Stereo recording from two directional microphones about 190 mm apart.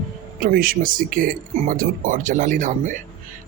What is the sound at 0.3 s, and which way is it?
Speech, 50° right (ahead or behind).